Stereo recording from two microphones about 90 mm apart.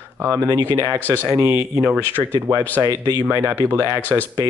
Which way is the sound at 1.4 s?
30° right (ahead or behind).